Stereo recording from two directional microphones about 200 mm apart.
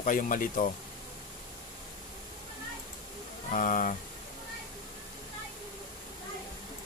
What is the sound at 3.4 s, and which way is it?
Speech, 40° left (ahead or behind).